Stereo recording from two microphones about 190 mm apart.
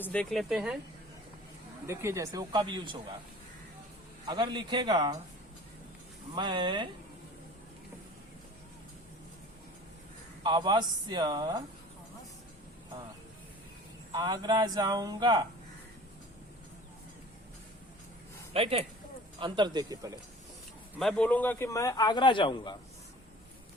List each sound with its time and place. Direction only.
0.0 s speech: 5° left (ahead or behind)
1.9 s speech: 15° right (ahead or behind)
4.3 s speech: 25° right (ahead or behind)
6.3 s speech: 25° right (ahead or behind)
10.4 s speech: 25° right (ahead or behind)
14.1 s speech: 20° right (ahead or behind)
18.5 s speech: 30° right (ahead or behind)
21.0 s speech: 5° left (ahead or behind); by 22.8 s 25° left (ahead or behind)